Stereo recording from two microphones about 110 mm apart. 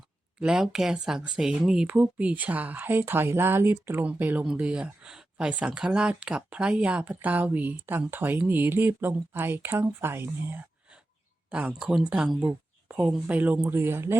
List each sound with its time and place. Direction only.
0.3 s speech: 5° right (ahead or behind); by 14.2 s 20° right (ahead or behind)